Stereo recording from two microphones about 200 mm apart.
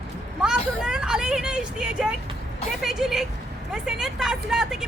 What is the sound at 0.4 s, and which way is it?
Vehicle, 5° right (ahead or behind).